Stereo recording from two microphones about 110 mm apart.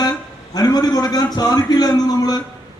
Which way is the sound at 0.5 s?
35° left (ahead or behind).